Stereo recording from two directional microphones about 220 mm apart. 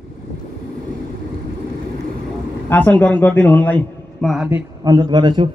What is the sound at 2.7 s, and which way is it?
A man's voice, 5° left (ahead or behind).